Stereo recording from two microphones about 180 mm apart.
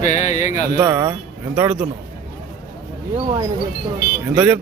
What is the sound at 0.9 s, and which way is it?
Speech, 15° right (ahead or behind).